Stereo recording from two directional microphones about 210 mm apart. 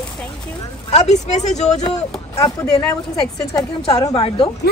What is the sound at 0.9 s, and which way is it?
Speech, 30° left (ahead or behind).